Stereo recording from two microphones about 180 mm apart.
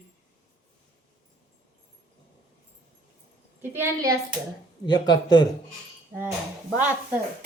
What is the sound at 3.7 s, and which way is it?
Speech, 15° right (ahead or behind).